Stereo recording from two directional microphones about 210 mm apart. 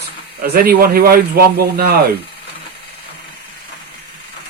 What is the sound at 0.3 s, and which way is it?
Speech, 45° right (ahead or behind).